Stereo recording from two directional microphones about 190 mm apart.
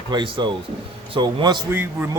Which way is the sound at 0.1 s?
25° right (ahead or behind).